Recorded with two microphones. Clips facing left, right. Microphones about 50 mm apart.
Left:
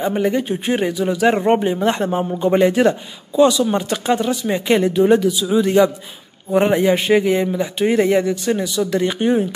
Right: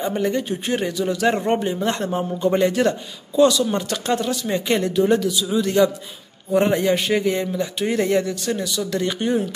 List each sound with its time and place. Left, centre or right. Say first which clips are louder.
0.0 s a man's voice: left 3 dB; centre